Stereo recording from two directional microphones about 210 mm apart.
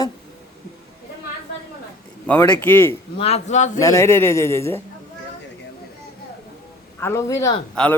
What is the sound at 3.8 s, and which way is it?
A man's voice, 15° left (ahead or behind).